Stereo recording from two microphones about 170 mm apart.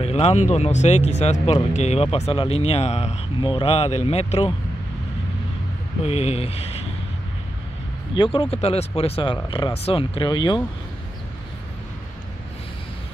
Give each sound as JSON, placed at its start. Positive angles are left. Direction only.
{"t": 0.0, "sound": "speech", "side_deg": 40}
{"t": 6.0, "sound": "speech", "side_deg": 40}
{"t": 8.1, "sound": "speech", "side_deg": 30}